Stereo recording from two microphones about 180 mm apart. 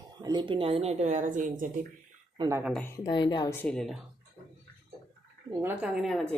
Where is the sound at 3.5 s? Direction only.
5° left (ahead or behind).